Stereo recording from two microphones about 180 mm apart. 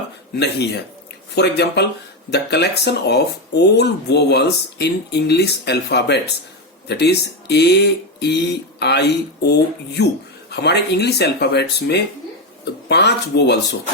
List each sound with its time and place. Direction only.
0.3 s speech: 70° left (ahead or behind)